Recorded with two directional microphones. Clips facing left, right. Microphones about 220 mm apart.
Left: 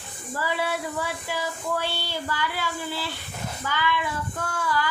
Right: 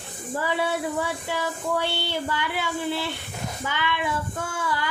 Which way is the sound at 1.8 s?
20° right (ahead or behind).